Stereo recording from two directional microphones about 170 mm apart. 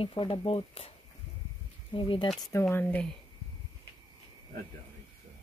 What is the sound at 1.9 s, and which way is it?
Speech, 30° left (ahead or behind).